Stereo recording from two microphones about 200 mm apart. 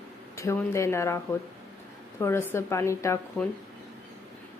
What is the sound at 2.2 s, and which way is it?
Speech, 10° left (ahead or behind).